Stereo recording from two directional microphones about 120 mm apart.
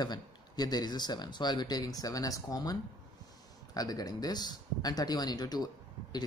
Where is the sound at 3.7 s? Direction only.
30° left (ahead or behind).